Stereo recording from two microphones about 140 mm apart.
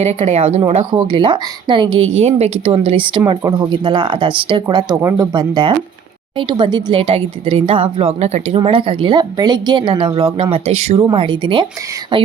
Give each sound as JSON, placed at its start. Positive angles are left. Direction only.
{"t": 0.0, "sound": "speech", "side_deg": -50}
{"t": 0.9, "sound": "a woman's voice", "side_deg": -35}
{"t": 2.2, "sound": "speech", "side_deg": -50}
{"t": 2.8, "sound": "a woman's voice", "side_deg": -35}